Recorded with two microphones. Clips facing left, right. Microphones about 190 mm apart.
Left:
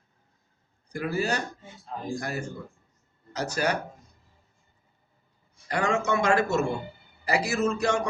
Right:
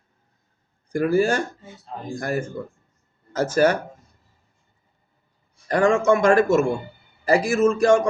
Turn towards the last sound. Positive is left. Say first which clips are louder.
# right 8 dB
turn(degrees=-50)  # may be behind; listen again after turning